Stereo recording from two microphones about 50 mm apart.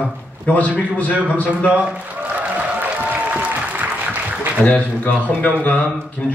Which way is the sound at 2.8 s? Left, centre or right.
Right.